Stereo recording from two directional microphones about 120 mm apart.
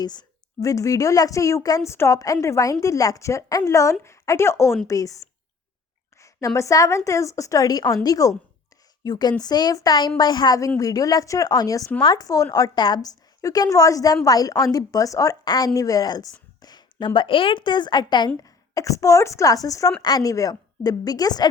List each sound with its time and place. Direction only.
0.0 s a woman's voice: 35° left (ahead or behind)
16.6 s a sound: 35° left (ahead or behind)
17.2 s a woman's voice: 45° left (ahead or behind)
18.4 s a woman's voice: 25° left (ahead or behind)